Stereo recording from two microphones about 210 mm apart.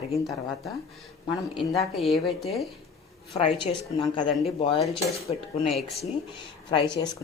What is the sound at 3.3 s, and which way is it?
Speech, 20° left (ahead or behind).